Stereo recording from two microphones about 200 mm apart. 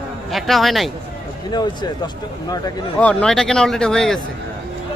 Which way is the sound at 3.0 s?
5° left (ahead or behind).